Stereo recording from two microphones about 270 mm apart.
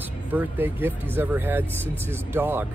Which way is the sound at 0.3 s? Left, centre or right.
Centre.